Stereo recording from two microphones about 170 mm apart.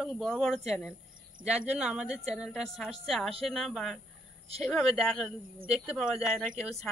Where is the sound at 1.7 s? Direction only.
5° right (ahead or behind).